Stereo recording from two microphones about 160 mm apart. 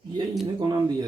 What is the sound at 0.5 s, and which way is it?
Speech, 25° right (ahead or behind).